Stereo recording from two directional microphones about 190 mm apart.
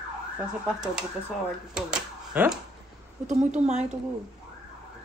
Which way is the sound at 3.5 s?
35° right (ahead or behind).